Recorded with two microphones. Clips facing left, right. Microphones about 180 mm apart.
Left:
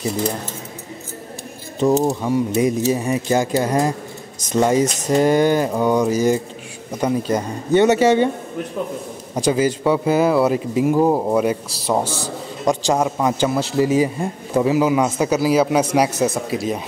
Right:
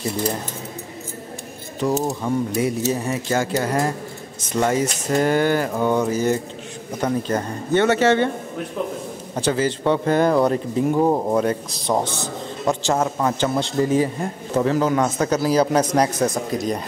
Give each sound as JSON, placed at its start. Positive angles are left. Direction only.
{"t": 1.8, "sound": "speech", "side_deg": 25}
{"t": 2.5, "sound": "a man's voice", "side_deg": 15}
{"t": 9.3, "sound": "a man's voice", "side_deg": 15}